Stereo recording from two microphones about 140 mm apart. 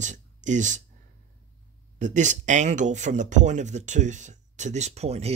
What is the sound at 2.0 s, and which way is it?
Speech, 60° right (ahead or behind).